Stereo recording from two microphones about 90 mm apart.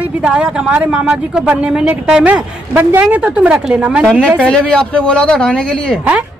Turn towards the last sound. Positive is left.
turn(degrees=10)  # may be behind; listen again after turning